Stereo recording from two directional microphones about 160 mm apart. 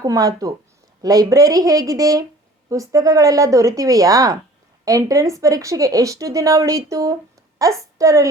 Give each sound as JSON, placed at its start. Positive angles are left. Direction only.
{"t": 0.0, "sound": "speech", "side_deg": -20}